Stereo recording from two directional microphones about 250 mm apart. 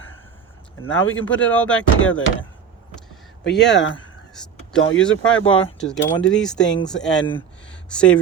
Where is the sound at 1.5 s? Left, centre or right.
Centre.